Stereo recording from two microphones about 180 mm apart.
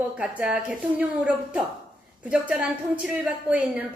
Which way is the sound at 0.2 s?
5° right (ahead or behind).